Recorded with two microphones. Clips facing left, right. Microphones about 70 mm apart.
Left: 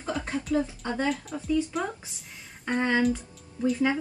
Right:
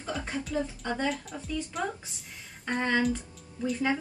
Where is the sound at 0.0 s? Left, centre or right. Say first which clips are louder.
Left 3 dB; centre.